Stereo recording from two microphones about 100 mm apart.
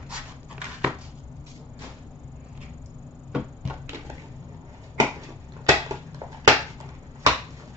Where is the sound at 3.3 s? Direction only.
10° right (ahead or behind).